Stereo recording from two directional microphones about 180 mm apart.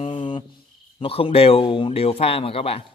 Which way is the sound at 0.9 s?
30° left (ahead or behind).